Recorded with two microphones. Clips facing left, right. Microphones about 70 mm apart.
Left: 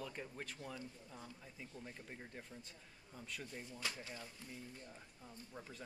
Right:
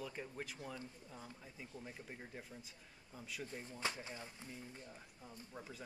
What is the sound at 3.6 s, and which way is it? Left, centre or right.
Speech, right.